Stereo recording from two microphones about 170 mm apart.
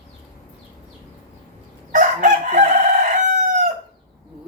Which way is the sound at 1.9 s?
45° right (ahead or behind).